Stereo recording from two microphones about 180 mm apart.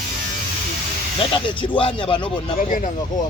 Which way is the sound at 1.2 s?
30° left (ahead or behind).